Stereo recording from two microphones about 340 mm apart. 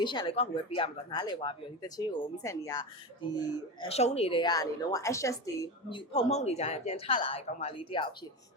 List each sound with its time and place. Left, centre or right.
0.0 s speech: centre